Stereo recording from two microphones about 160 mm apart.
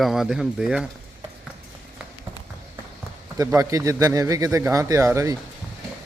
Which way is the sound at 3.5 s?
20° right (ahead or behind).